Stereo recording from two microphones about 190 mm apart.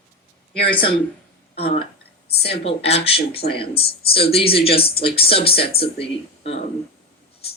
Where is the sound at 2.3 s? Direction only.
55° left (ahead or behind).